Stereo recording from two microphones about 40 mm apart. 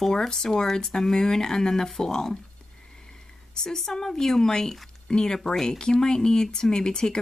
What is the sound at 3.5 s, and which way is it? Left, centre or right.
Speech, centre.